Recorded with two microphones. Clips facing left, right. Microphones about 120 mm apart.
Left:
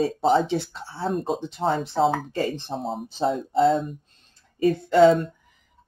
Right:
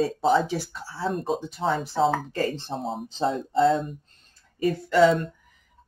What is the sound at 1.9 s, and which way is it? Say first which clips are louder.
Speech: left 1 dB; centre (ahead or behind).